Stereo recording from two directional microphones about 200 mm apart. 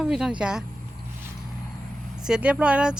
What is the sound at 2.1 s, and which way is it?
Speech, 5° right (ahead or behind).